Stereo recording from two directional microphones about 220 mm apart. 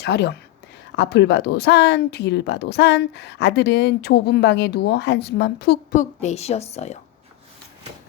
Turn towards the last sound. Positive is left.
turn(degrees=30)  # may be behind; listen again after turning